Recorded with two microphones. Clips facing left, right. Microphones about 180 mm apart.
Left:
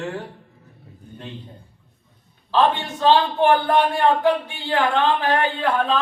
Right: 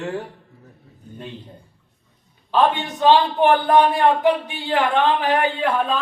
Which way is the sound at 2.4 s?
15° right (ahead or behind).